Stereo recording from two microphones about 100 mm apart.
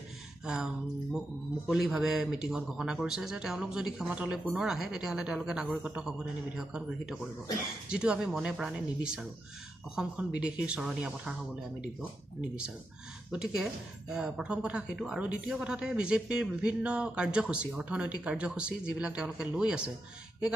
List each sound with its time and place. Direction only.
1.7 s a man's voice: 5° right (ahead or behind)
12.4 s speech: 10° right (ahead or behind)